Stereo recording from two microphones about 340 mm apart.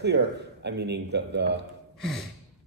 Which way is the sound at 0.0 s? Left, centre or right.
Right.